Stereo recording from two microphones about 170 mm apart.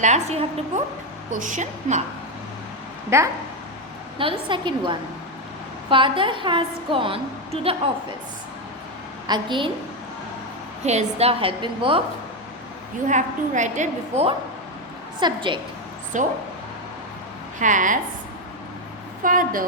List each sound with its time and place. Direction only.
0.0 s a woman's voice: 40° right (ahead or behind)
1.3 s a woman's voice: 50° right (ahead or behind)
3.1 s speech: 15° right (ahead or behind)
4.2 s a woman's voice: 30° right (ahead or behind)
9.2 s a woman's voice: 25° right (ahead or behind)
10.8 s a woman's voice: 40° right (ahead or behind)
13.1 s a woman's voice: 45° right (ahead or behind)
15.2 s a woman's voice: 30° right (ahead or behind)
16.1 s a woman's voice: 50° right (ahead or behind)
17.6 s a woman's voice: 50° right (ahead or behind)
19.2 s a woman's voice: 55° right (ahead or behind)